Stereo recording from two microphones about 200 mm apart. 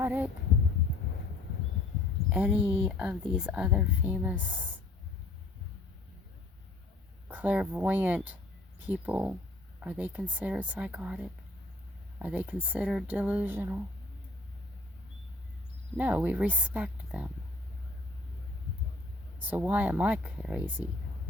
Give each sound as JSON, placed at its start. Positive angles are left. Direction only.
{"t": 0.0, "sound": "a sound", "side_deg": -10}
{"t": 2.3, "sound": "speech", "side_deg": -5}
{"t": 7.3, "sound": "speech", "side_deg": -10}
{"t": 16.0, "sound": "speech", "side_deg": -10}
{"t": 19.5, "sound": "speech", "side_deg": -10}